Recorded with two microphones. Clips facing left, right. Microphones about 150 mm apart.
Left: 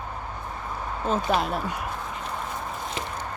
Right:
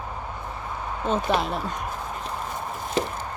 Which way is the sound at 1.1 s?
Centre (ahead or behind).